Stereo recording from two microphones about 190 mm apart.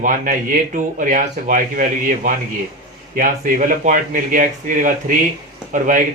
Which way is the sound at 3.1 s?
45° right (ahead or behind).